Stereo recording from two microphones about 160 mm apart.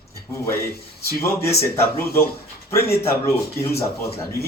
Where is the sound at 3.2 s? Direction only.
20° left (ahead or behind).